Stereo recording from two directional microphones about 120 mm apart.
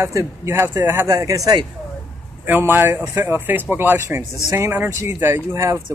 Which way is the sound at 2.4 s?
15° right (ahead or behind).